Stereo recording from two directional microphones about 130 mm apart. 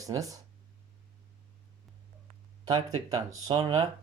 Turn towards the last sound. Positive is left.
turn(degrees=-35)  # may be behind; listen again after turning